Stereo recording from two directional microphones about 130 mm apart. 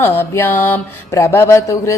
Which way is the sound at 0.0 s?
15° left (ahead or behind).